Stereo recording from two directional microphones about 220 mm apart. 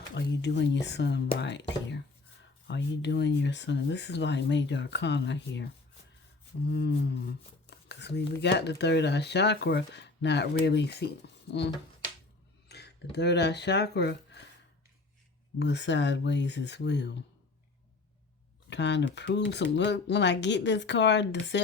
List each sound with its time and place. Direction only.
0.1 s speech: 50° left (ahead or behind)
6.7 s speech: 50° left (ahead or behind)
12.6 s speech: 50° left (ahead or behind)
15.5 s speech: 50° left (ahead or behind)
18.7 s speech: 50° left (ahead or behind)